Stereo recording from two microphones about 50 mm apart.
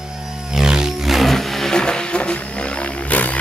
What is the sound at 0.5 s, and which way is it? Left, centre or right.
Roar, centre.